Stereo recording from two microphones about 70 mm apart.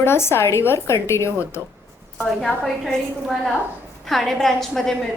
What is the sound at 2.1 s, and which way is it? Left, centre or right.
A woman's voice, centre.